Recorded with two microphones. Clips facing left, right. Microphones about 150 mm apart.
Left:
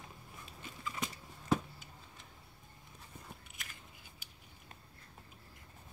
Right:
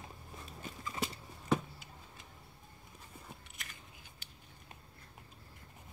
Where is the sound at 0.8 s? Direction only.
30° right (ahead or behind).